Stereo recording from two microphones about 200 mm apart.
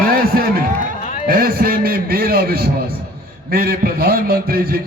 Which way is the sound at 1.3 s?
45° right (ahead or behind).